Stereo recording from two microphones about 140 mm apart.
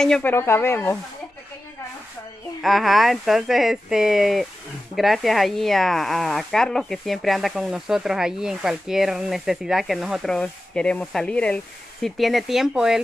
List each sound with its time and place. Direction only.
0.0 s speech: 5° left (ahead or behind)
0.3 s speech: 15° left (ahead or behind)
2.6 s speech: centre (ahead or behind)